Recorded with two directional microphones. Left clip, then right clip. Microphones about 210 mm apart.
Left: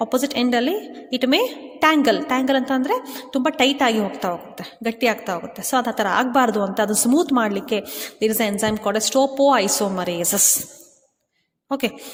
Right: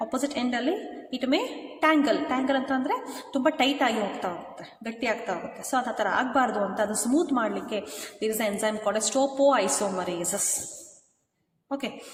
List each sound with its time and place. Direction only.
0.0 s a woman's voice: 45° left (ahead or behind)